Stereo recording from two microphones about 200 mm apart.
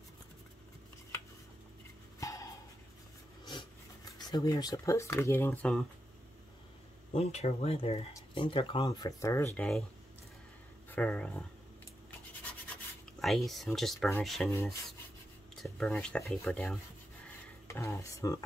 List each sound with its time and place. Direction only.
2.1 s a sound: 15° left (ahead or behind)
4.3 s speech: 20° left (ahead or behind)
7.1 s speech: 30° left (ahead or behind); by 9.7 s 15° left (ahead or behind)
10.9 s speech: 5° left (ahead or behind)
13.2 s speech: centre (ahead or behind)
14.5 s speech: 15° left (ahead or behind)
15.6 s speech: centre (ahead or behind)